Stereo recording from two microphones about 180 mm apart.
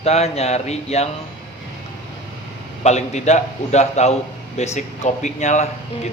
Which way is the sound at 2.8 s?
40° left (ahead or behind).